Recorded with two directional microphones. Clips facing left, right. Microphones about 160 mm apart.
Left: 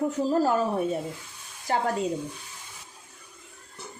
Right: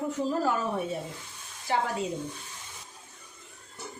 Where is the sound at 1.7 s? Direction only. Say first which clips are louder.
Left 1 dB; 45° left (ahead or behind).